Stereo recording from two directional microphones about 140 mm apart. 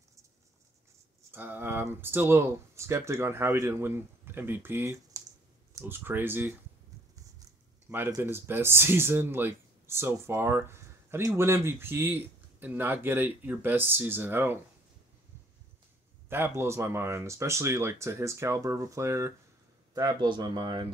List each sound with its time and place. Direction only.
1.3 s speech: 15° right (ahead or behind)
8.2 s speech: 15° right (ahead or behind)
16.3 s speech: 15° right (ahead or behind); by 20.9 s 30° right (ahead or behind)